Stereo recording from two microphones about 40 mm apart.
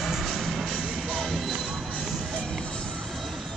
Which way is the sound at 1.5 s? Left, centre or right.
Centre.